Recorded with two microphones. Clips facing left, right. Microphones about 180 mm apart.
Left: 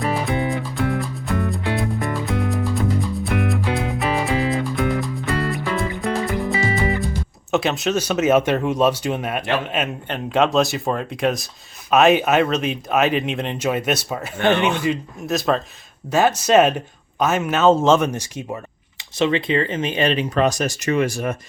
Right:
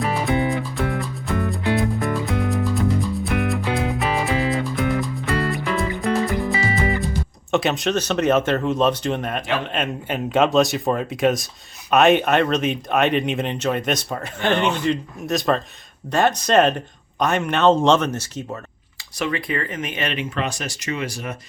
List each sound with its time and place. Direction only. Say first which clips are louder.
0.0 s music: right 1 dB; centre (ahead or behind)
7.5 s speech: even; centre (ahead or behind)
19.2 s speech: left 6 dB; 25° left (ahead or behind); by 21.3 s 50° left (ahead or behind)